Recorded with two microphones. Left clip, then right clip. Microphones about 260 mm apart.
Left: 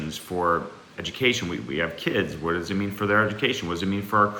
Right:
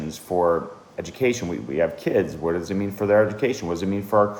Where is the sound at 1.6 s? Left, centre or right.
Centre.